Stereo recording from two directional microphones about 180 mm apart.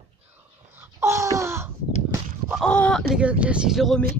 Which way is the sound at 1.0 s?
15° right (ahead or behind).